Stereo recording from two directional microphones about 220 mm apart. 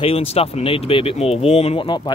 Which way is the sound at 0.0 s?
25° left (ahead or behind).